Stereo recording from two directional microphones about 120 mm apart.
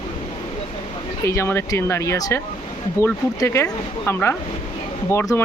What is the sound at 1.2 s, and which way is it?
Speech, 25° left (ahead or behind).